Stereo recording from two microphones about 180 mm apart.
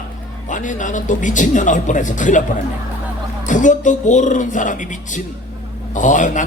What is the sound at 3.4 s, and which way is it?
A man's voice, 45° left (ahead or behind).